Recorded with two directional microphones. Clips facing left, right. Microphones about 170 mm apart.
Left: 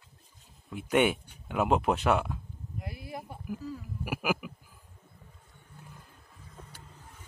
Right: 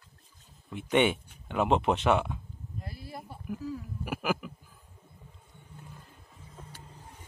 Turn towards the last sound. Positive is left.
turn(degrees=-35)  # may be behind; listen again after turning